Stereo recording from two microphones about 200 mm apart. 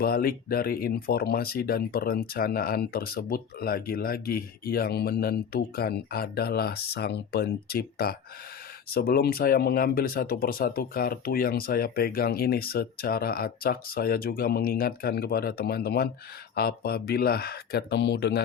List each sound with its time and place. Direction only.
0.0 s speech: 50° left (ahead or behind)